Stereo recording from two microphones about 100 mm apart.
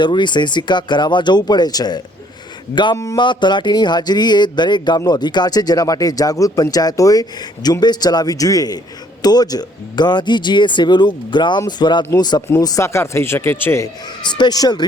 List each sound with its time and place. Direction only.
0.0 s speech: 50° left (ahead or behind); by 3.2 s 35° left (ahead or behind)
3.2 s speech: 50° left (ahead or behind); by 13.9 s 25° left (ahead or behind)
14.3 s speech: 45° left (ahead or behind)